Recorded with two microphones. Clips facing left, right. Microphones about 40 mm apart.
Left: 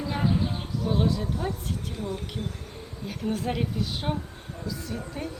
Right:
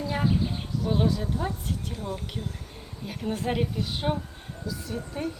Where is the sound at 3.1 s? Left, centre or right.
Centre.